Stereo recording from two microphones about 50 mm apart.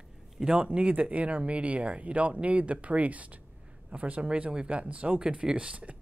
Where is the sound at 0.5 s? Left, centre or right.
Right.